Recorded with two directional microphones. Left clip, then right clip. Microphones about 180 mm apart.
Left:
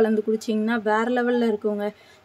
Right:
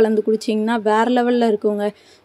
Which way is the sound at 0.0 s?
25° right (ahead or behind).